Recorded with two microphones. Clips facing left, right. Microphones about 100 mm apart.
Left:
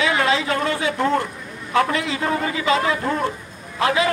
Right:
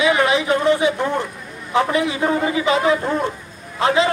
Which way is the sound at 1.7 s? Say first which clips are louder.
Right 2 dB; 20° right (ahead or behind).